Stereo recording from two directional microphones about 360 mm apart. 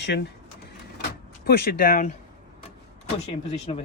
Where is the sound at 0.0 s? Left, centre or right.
Left.